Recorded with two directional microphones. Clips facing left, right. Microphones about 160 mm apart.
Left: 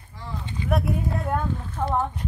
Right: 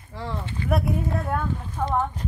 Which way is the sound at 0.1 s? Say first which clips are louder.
Right 5 dB; 90° right.